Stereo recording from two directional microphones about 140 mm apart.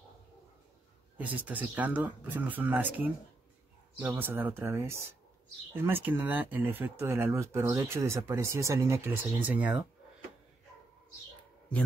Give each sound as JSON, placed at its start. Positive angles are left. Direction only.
{"t": 1.4, "sound": "speech", "side_deg": -10}